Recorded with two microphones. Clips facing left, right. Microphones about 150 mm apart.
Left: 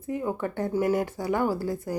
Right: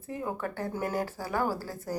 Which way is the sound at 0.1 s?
5° left (ahead or behind).